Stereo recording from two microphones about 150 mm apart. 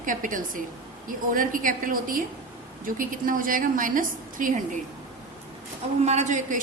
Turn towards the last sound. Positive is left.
turn(degrees=-60)  # may be behind; listen again after turning